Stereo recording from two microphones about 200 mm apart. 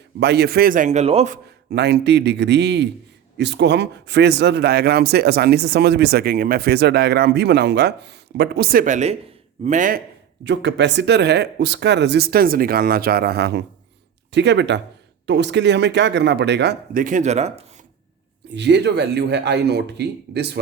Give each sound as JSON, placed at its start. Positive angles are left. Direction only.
{"t": 0.2, "sound": "a man's voice", "side_deg": -55}
{"t": 1.7, "sound": "a man's voice", "side_deg": -55}
{"t": 10.4, "sound": "speech", "side_deg": -60}
{"t": 18.5, "sound": "speech", "side_deg": -60}